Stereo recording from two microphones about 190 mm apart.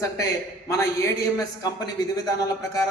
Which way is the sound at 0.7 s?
15° left (ahead or behind).